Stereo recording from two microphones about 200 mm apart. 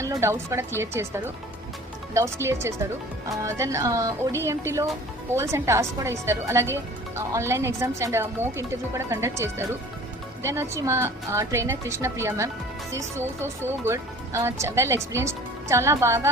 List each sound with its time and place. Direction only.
0.0 s speech: 15° right (ahead or behind)